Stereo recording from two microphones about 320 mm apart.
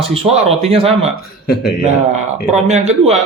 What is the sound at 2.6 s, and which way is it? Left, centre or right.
Speech, right.